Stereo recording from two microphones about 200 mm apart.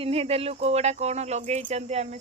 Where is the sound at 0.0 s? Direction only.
30° right (ahead or behind).